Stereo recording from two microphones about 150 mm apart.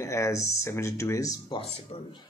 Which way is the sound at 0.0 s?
20° left (ahead or behind).